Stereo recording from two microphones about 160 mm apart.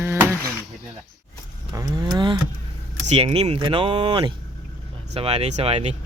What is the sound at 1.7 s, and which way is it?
Cattle, 25° right (ahead or behind).